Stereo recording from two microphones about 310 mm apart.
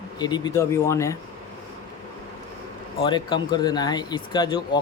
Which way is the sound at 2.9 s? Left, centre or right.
Centre.